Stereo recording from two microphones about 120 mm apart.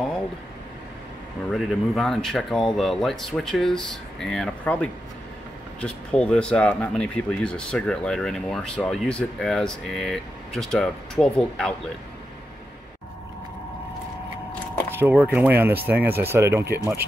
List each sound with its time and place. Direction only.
1.5 s speech: centre (ahead or behind)
15.0 s speech: 15° right (ahead or behind)